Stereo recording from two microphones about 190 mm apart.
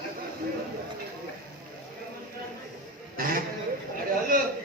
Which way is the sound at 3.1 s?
50° right (ahead or behind).